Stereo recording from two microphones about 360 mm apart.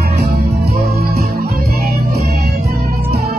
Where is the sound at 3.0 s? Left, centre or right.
Right.